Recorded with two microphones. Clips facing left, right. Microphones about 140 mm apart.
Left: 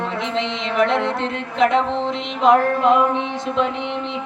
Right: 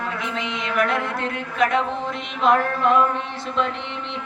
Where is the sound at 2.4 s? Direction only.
20° left (ahead or behind).